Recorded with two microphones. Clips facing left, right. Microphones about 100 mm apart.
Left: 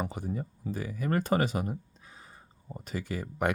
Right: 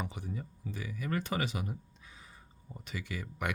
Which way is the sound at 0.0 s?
45° left (ahead or behind).